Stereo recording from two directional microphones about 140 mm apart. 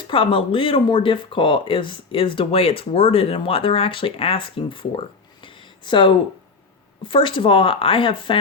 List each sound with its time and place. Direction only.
0.1 s speech: 40° left (ahead or behind)